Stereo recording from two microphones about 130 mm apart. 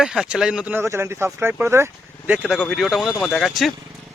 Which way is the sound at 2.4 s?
10° left (ahead or behind).